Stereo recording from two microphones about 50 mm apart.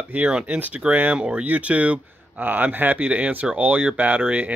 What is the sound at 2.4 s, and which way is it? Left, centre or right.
Speech, right.